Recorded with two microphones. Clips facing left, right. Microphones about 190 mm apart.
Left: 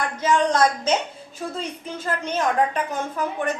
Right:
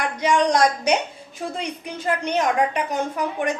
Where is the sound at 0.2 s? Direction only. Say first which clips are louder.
Right 1 dB; 15° right (ahead or behind).